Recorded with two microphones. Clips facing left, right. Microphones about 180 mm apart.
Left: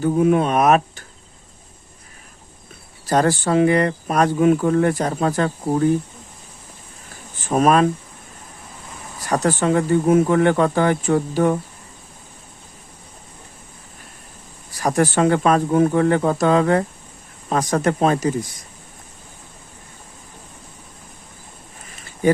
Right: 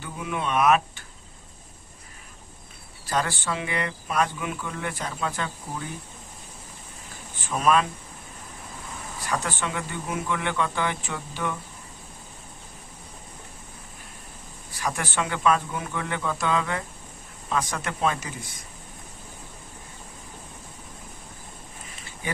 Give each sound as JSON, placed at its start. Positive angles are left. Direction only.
{"t": 0.0, "sound": "speech", "side_deg": 45}
{"t": 3.1, "sound": "speech", "side_deg": 40}
{"t": 7.3, "sound": "speech", "side_deg": 45}
{"t": 9.3, "sound": "speech", "side_deg": 40}
{"t": 14.7, "sound": "speech", "side_deg": 40}